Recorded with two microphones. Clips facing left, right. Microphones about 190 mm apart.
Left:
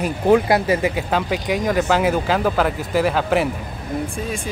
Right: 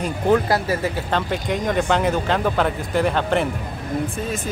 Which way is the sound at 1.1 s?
5° left (ahead or behind).